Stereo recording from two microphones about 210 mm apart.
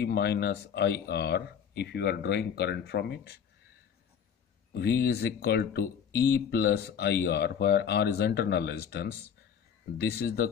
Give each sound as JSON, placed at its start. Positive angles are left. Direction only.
{"t": 0.0, "sound": "speech", "side_deg": 50}
{"t": 4.7, "sound": "speech", "side_deg": 50}